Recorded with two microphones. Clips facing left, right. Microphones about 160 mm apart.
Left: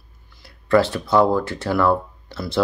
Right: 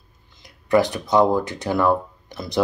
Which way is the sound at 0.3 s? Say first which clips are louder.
Left 1 dB; 20° right (ahead or behind).